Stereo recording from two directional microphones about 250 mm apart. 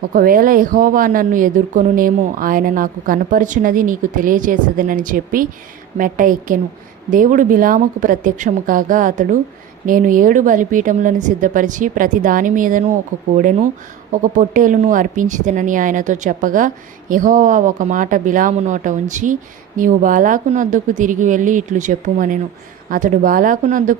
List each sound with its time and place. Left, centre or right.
0.1 s a woman's voice: right